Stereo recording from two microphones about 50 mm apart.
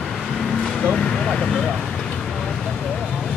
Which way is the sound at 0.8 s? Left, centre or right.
Centre.